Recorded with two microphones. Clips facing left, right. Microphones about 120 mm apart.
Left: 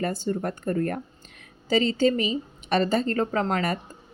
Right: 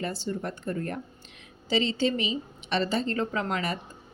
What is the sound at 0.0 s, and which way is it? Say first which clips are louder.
A woman's voice: left 5 dB; 50° left (ahead or behind).